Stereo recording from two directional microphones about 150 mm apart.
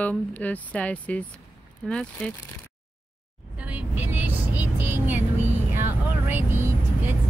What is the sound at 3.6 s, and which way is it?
Vehicle, 10° right (ahead or behind).